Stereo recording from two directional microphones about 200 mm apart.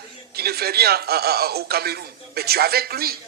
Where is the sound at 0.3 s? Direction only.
50° right (ahead or behind).